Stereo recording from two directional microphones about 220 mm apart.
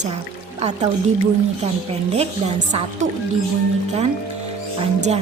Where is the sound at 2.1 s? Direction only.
30° right (ahead or behind).